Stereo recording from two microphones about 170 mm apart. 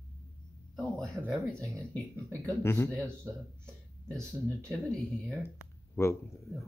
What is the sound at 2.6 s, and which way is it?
Speech, 15° left (ahead or behind).